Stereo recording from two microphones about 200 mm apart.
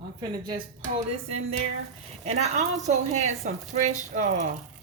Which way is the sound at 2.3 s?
35° right (ahead or behind).